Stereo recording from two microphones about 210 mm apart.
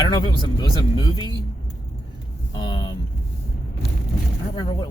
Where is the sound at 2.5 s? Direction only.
20° left (ahead or behind).